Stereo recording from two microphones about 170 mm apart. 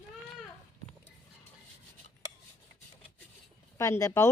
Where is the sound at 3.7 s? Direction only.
15° left (ahead or behind).